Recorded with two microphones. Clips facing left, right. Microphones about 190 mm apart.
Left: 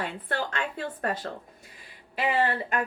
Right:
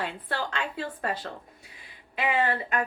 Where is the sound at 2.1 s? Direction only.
35° left (ahead or behind).